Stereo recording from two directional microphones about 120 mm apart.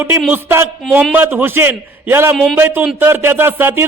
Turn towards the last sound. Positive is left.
turn(degrees=-15)  # may be behind; listen again after turning